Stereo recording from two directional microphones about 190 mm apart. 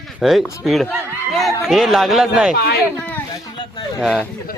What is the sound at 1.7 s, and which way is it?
Speech, centre (ahead or behind).